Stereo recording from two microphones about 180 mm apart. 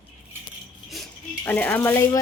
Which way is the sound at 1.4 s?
10° left (ahead or behind).